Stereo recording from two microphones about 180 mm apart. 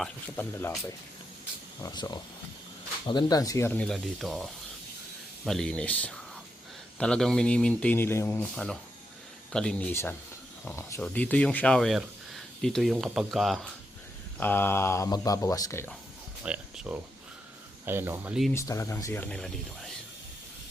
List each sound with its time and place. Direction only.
0.0 s speech: 10° left (ahead or behind)
1.8 s speech: 25° left (ahead or behind)
3.8 s speech: centre (ahead or behind)
5.5 s speech: 5° left (ahead or behind)
14.3 s speech: 10° left (ahead or behind)
16.4 s a sound: 5° right (ahead or behind)
17.8 s speech: 10° right (ahead or behind)
18.5 s speech: 15° left (ahead or behind)